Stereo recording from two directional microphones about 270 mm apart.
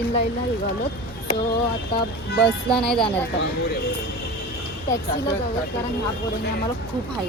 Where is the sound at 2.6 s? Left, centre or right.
Centre.